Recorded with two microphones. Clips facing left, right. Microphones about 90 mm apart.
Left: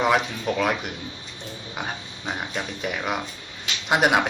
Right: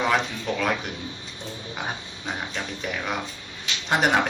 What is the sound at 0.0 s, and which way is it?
Speech, 5° left (ahead or behind).